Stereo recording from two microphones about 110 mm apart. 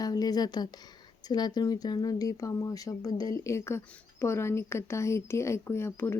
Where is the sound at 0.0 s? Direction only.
35° left (ahead or behind).